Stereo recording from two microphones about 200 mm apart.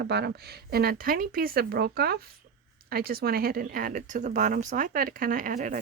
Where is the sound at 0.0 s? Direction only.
55° right (ahead or behind).